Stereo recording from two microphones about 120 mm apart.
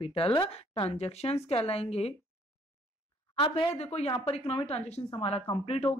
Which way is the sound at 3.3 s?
50° left (ahead or behind).